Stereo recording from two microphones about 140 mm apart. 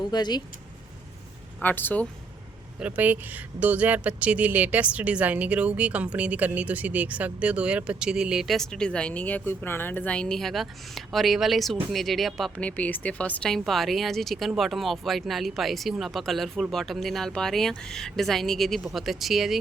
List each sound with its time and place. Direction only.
0.1 s speech: 30° left (ahead or behind)
1.6 s speech: 15° left (ahead or behind)
2.7 s speech: 10° right (ahead or behind)